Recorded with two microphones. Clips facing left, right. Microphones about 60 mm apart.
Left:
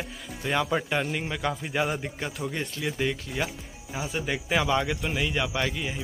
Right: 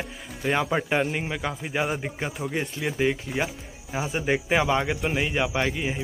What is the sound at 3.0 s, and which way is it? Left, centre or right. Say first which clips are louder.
Speech: right 5 dB; centre.